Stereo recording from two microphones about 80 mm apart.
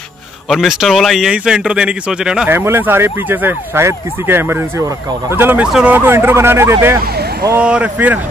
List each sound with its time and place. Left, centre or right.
0.5 s speech: centre
2.5 s speech: right
7.5 s speech: centre